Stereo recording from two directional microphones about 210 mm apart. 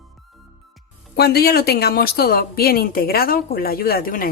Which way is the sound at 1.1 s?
50° left (ahead or behind).